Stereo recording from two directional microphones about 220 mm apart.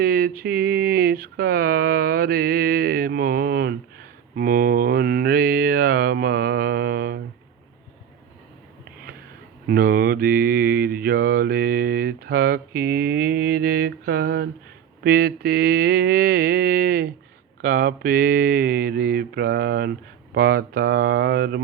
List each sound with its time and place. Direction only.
0.0 s mantra: 45° right (ahead or behind)
9.6 s mantra: 40° right (ahead or behind)